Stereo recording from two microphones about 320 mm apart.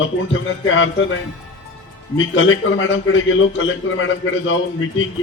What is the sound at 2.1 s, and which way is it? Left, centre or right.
A man's voice, left.